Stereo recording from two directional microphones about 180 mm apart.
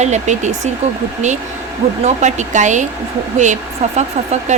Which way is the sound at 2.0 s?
40° right (ahead or behind).